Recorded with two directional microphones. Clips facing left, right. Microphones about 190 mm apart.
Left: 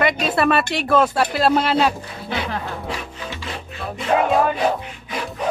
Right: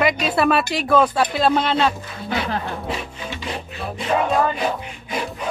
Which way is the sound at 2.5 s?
25° right (ahead or behind).